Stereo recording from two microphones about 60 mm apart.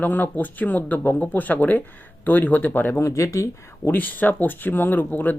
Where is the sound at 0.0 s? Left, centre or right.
Left.